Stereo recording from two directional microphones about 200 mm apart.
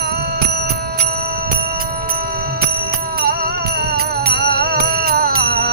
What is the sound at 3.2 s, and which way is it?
Music, 50° right (ahead or behind).